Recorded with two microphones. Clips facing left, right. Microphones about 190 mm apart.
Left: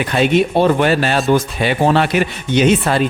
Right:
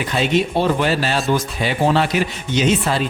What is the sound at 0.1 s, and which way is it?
Speech, 55° left (ahead or behind).